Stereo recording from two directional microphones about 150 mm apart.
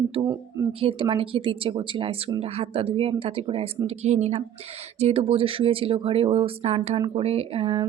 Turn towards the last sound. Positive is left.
turn(degrees=-35)  # may be behind; listen again after turning